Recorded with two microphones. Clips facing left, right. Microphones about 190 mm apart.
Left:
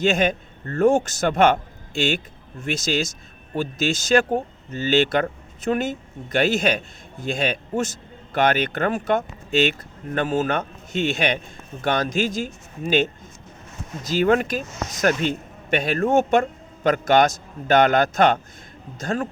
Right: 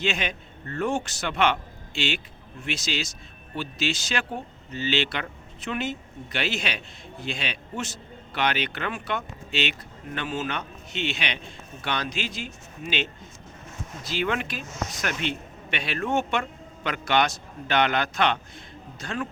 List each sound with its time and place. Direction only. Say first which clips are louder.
0.0 s a man's voice: left 9 dB; 45° left (ahead or behind)